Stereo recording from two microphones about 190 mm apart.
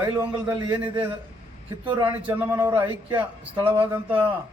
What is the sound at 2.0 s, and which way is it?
Speech, 10° right (ahead or behind).